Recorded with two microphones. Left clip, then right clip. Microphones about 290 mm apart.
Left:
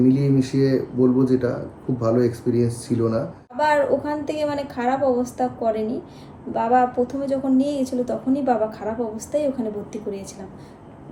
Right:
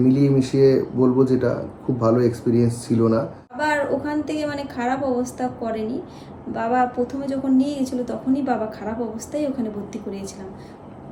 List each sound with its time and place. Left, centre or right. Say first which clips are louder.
0.1 s speech: right 2 dB; centre
3.6 s a woman's voice: left 3 dB; centre